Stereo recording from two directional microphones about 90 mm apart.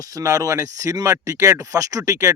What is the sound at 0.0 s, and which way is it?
Speech, 40° right (ahead or behind).